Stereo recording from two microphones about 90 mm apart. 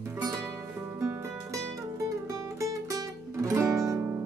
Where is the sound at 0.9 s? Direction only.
40° right (ahead or behind).